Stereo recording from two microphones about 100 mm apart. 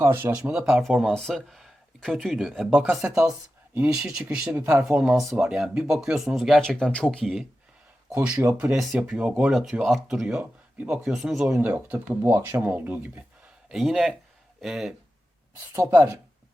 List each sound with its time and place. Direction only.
0.0 s speech: 25° right (ahead or behind)
0.3 s speech: 5° right (ahead or behind)
8.1 s speech: 15° right (ahead or behind)
11.4 s speech: 10° right (ahead or behind)
13.7 s speech: centre (ahead or behind)
15.7 s speech: 20° right (ahead or behind)